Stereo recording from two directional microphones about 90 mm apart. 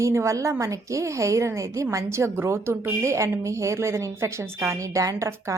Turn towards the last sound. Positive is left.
turn(degrees=-35)  # may be behind; listen again after turning